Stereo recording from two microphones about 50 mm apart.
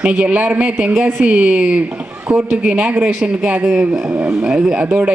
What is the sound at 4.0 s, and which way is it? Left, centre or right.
Speech, right.